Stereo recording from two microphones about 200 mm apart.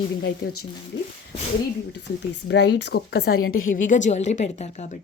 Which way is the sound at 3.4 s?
90° left.